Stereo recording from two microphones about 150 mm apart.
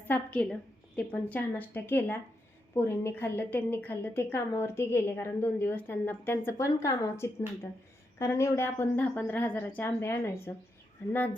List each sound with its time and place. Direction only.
0.1 s a woman's voice: 10° left (ahead or behind)